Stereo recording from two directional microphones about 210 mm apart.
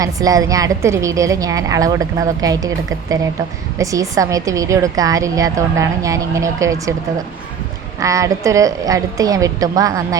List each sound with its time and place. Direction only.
0.0 s a woman's voice: 15° right (ahead or behind)
7.9 s a woman's voice: 15° right (ahead or behind)